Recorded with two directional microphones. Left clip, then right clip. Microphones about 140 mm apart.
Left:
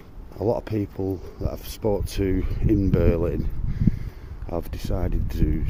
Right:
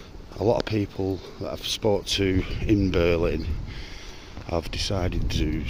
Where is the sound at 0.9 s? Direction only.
15° left (ahead or behind).